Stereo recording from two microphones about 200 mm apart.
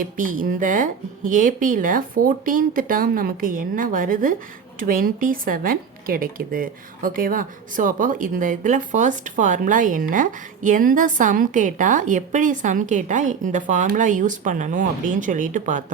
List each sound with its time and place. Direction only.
0.0 s a woman's voice: 40° right (ahead or behind)